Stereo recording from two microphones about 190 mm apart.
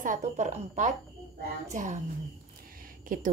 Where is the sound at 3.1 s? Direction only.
45° right (ahead or behind).